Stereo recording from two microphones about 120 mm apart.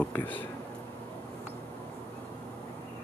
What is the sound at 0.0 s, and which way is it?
Speech, 15° left (ahead or behind).